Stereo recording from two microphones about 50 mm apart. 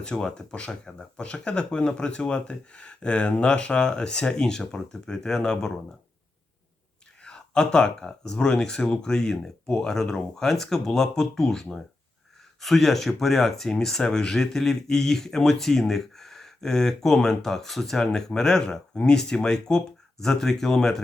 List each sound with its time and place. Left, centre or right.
0.0 s speech: centre
7.2 s speech: centre